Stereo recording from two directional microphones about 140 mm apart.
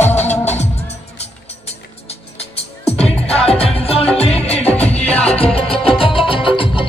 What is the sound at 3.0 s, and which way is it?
Music, 45° left (ahead or behind).